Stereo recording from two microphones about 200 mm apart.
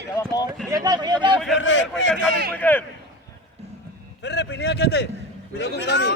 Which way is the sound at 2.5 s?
10° left (ahead or behind).